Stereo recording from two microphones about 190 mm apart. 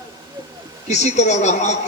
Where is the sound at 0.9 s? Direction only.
35° left (ahead or behind).